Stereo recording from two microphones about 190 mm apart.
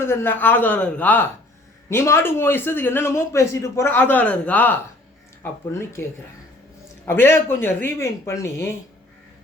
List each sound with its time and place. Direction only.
0.1 s a man's voice: 10° left (ahead or behind)